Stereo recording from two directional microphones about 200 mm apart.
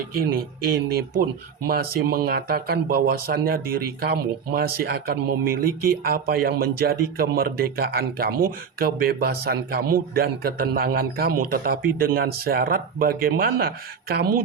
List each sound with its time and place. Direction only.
0.1 s speech: 50° right (ahead or behind)